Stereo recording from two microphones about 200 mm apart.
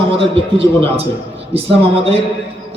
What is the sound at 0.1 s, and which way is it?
A man's voice, 30° right (ahead or behind).